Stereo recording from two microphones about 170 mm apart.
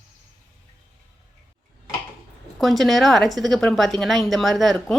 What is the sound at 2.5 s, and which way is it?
A woman's voice, centre (ahead or behind).